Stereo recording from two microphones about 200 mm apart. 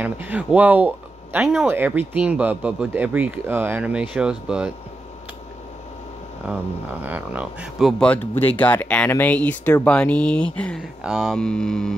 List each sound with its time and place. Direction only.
0.0 s speech: 10° right (ahead or behind)
6.4 s speech: 5° right (ahead or behind)